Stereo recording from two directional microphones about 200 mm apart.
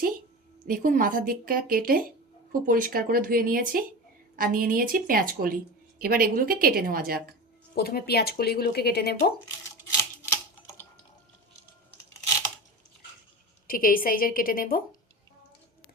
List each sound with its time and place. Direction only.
0.7 s a woman's voice: 45° right (ahead or behind)
7.8 s speech: 50° left (ahead or behind)
13.7 s speech: 45° left (ahead or behind)